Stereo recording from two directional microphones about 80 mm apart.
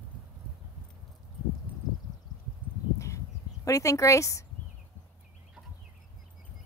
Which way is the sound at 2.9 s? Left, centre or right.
Left.